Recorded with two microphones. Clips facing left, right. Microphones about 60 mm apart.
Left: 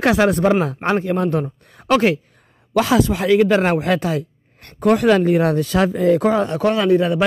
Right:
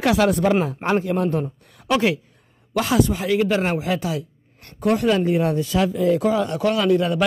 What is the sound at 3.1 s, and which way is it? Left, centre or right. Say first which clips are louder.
A woman's voice: left 5 dB; left.